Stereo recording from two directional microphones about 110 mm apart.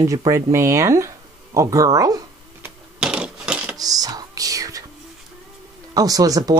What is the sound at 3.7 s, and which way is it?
Whispering, 35° right (ahead or behind).